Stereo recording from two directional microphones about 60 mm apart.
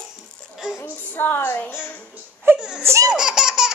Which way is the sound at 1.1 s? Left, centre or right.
Left.